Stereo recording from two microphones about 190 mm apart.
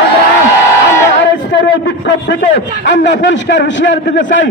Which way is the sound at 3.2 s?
70° left (ahead or behind).